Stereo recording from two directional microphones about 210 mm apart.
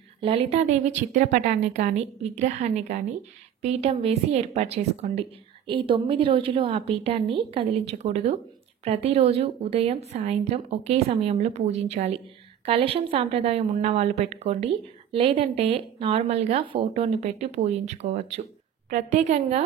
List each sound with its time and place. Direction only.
0.2 s a woman's voice: 30° right (ahead or behind)